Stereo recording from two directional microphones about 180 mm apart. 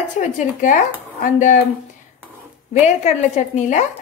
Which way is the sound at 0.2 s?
45° left (ahead or behind).